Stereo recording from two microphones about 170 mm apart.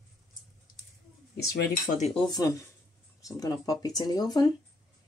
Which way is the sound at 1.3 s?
65° left (ahead or behind).